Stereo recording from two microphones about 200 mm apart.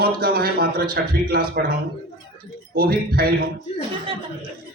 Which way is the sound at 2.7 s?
50° right (ahead or behind).